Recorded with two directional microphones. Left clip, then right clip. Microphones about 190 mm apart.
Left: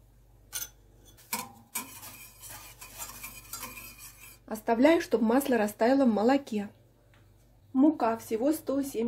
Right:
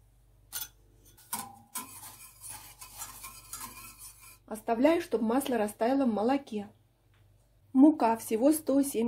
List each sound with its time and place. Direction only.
4.5 s speech: 10° left (ahead or behind)
7.7 s speech: 40° right (ahead or behind)